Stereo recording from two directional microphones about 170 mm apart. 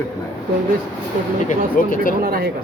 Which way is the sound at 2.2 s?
60° right (ahead or behind).